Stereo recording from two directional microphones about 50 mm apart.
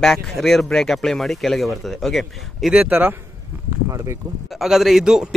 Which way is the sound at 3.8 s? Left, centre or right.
Right.